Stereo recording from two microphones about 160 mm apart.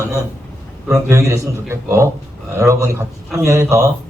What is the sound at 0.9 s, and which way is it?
A man's voice, 20° right (ahead or behind).